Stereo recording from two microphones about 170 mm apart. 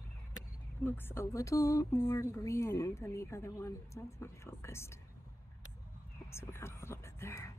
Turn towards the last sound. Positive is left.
turn(degrees=15)  # may be behind; listen again after turning